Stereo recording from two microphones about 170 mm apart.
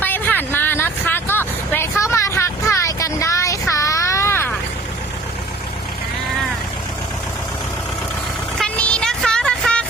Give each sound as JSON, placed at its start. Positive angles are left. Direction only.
{"t": 0.0, "sound": "vehicle", "side_deg": 10}
{"t": 8.5, "sound": "vehicle", "side_deg": 5}